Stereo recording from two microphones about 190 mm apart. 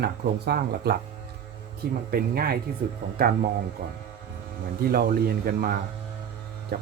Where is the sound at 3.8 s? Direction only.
50° right (ahead or behind).